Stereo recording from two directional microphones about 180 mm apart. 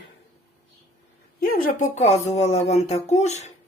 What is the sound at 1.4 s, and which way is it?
Speech, 50° left (ahead or behind).